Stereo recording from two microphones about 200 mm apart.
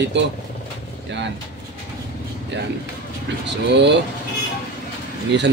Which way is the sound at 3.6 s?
60° right (ahead or behind).